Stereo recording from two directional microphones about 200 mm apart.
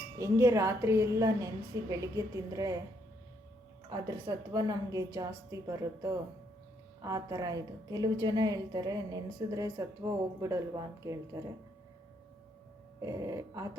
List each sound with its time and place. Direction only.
0.2 s a woman's voice: 15° right (ahead or behind)
3.8 s a woman's voice: 20° right (ahead or behind)
13.0 s a woman's voice: 15° right (ahead or behind)